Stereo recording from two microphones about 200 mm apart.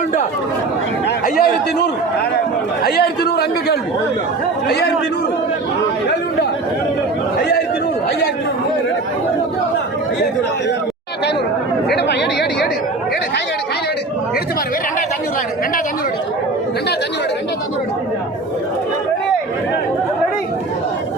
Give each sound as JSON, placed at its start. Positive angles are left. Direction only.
{"t": 1.0, "sound": "a man's voice", "side_deg": 50}
{"t": 11.9, "sound": "chatter", "side_deg": 55}